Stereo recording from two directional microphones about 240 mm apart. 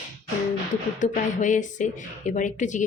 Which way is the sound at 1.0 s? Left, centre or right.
Left.